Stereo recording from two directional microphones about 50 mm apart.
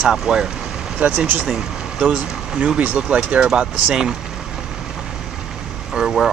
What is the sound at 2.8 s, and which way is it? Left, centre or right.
Speech, right.